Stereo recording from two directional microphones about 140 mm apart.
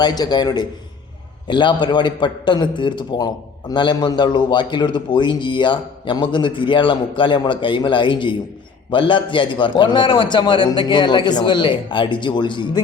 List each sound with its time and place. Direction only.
0.0 s a man's voice: 30° left (ahead or behind)